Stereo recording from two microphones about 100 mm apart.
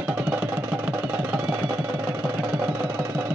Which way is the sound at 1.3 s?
15° right (ahead or behind).